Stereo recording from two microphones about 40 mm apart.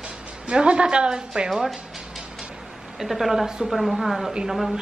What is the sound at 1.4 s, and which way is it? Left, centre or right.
Speech, centre.